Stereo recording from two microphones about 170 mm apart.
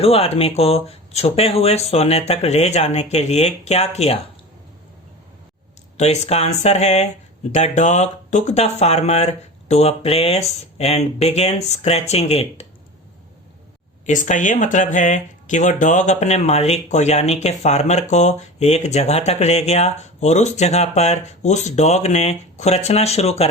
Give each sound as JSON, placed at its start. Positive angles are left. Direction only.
{"t": 0.0, "sound": "speech", "side_deg": 35}
{"t": 6.0, "sound": "speech", "side_deg": 40}
{"t": 14.1, "sound": "speech", "side_deg": 45}